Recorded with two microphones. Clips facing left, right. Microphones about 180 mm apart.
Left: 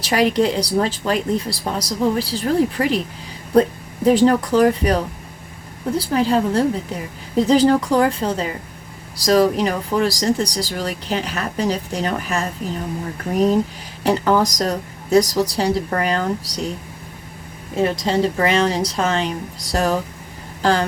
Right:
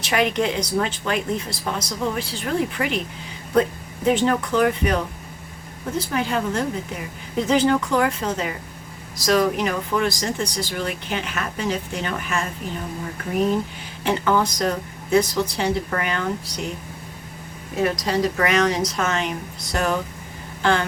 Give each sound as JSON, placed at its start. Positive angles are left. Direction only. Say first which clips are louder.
{"t": 0.0, "sound": "speech", "louder": "left 4 dB", "side_deg": 35}
{"t": 6.0, "sound": "speech", "louder": "left 6 dB", "side_deg": 35}
{"t": 14.0, "sound": "speech", "louder": "left 4 dB", "side_deg": 40}
{"t": 17.7, "sound": "speech", "louder": "left 3 dB", "side_deg": 25}